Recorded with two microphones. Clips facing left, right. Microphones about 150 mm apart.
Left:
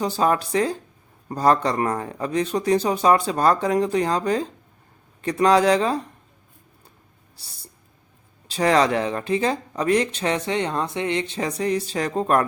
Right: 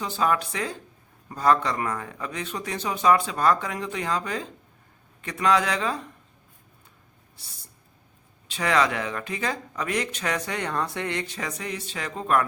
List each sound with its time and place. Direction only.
0.0 s speech: 35° left (ahead or behind)
7.3 s a sound: 35° left (ahead or behind)
8.4 s speech: 35° left (ahead or behind)